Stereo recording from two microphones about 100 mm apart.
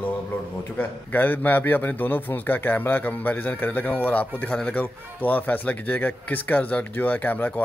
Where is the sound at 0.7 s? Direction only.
20° left (ahead or behind).